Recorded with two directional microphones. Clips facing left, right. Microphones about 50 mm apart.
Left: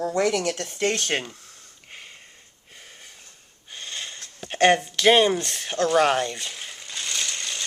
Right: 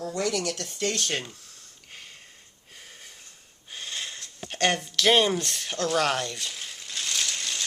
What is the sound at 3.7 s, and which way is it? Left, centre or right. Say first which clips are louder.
Wheeze: even; centre.